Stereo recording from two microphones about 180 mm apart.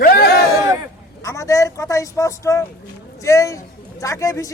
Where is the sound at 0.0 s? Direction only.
55° left (ahead or behind).